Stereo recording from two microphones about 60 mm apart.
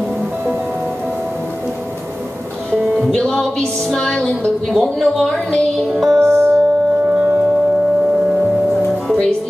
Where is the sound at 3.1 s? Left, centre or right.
Centre.